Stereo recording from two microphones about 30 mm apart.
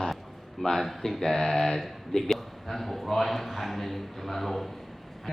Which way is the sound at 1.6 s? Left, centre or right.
Centre.